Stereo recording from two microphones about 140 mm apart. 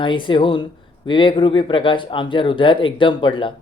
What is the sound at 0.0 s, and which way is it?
Speech, 35° left (ahead or behind).